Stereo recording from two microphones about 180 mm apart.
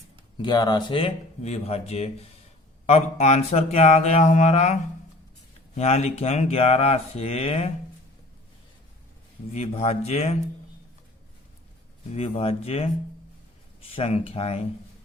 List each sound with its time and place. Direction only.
0.4 s mantra: 25° left (ahead or behind)
9.5 s mantra: 35° left (ahead or behind)
12.1 s mantra: 35° left (ahead or behind)